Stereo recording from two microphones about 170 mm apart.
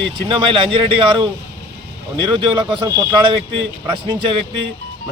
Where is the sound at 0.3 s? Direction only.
30° right (ahead or behind).